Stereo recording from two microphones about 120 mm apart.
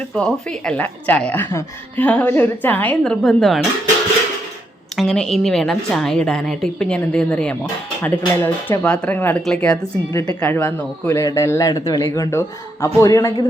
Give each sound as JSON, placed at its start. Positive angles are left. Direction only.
{"t": 0.1, "sound": "a woman's voice", "side_deg": 5}
{"t": 4.9, "sound": "a woman's voice", "side_deg": 5}
{"t": 10.1, "sound": "a man's voice", "side_deg": 25}
{"t": 11.2, "sound": "a man's voice", "side_deg": 25}